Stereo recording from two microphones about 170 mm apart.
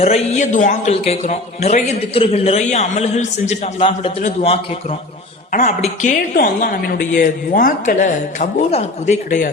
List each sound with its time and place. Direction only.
0.0 s a man's voice: 40° left (ahead or behind)
6.3 s speech: 60° left (ahead or behind)